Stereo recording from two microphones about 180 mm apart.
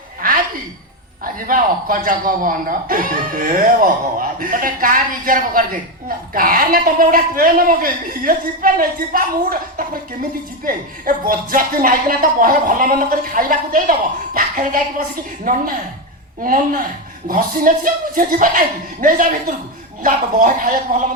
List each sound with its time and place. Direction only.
1.2 s a woman's voice: 50° right (ahead or behind)